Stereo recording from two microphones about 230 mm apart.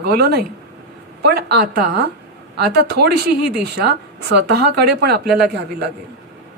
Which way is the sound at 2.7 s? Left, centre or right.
Right.